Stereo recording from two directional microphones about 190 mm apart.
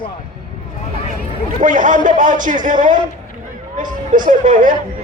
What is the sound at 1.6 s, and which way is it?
A man's voice, 45° right (ahead or behind).